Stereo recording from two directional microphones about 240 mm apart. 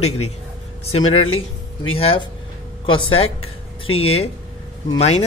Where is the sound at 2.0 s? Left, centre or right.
Left.